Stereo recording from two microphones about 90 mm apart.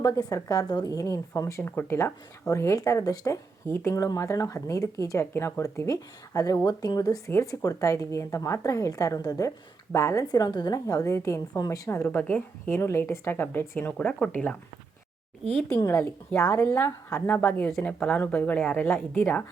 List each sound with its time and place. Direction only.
0.0 s speech: 40° left (ahead or behind)
7.3 s speech: 35° left (ahead or behind)
12.1 s speech: 25° left (ahead or behind)
14.0 s speech: 10° left (ahead or behind)
16.5 s speech: 30° left (ahead or behind)